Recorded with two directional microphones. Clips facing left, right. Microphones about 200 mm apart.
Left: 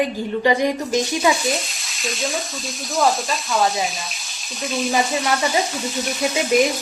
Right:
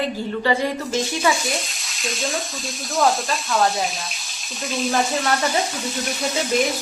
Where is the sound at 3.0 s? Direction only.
Centre (ahead or behind).